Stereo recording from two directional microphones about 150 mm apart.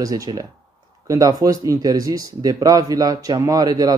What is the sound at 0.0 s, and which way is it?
A man's voice, 25° right (ahead or behind).